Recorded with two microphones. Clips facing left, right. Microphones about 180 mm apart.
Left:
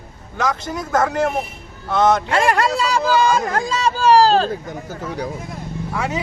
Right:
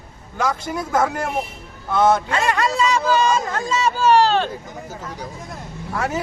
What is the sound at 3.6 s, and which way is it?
Speech, 35° left (ahead or behind).